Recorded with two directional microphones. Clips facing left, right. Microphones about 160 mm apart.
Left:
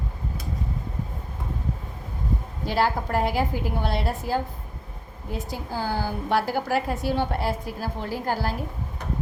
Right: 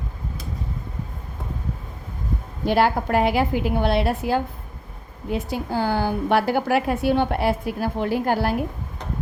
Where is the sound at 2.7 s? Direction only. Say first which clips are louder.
Right 5 dB; 60° right (ahead or behind).